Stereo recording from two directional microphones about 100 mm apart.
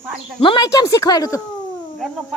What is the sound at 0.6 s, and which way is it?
Speech, 35° left (ahead or behind).